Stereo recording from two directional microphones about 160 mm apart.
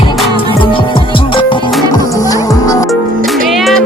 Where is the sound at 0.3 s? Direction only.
35° left (ahead or behind).